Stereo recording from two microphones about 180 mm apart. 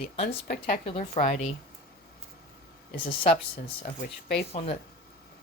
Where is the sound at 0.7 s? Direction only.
35° left (ahead or behind).